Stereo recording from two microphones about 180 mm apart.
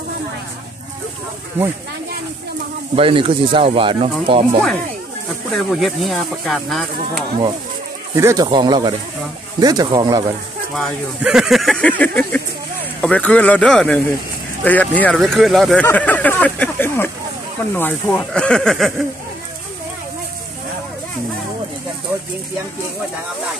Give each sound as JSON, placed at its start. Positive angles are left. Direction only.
{"t": 3.0, "sound": "speech", "side_deg": -30}
{"t": 5.5, "sound": "speech", "side_deg": 0}
{"t": 8.2, "sound": "speech", "side_deg": -20}
{"t": 10.8, "sound": "speech", "side_deg": -5}